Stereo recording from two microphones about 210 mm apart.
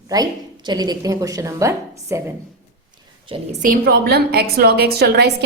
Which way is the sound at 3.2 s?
25° right (ahead or behind).